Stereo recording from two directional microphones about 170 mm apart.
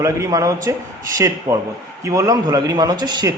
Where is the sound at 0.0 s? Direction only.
20° right (ahead or behind).